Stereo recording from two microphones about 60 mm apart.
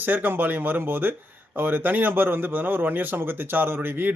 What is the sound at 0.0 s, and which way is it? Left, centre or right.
Speech, right.